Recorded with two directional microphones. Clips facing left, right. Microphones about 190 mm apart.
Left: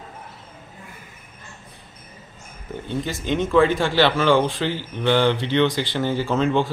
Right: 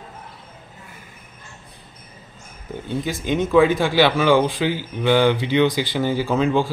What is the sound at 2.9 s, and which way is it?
Speech, 10° right (ahead or behind).